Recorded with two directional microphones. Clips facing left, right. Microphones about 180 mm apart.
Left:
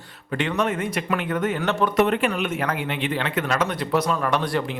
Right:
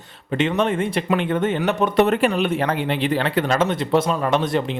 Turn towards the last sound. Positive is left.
turn(degrees=-20)  # may be behind; listen again after turning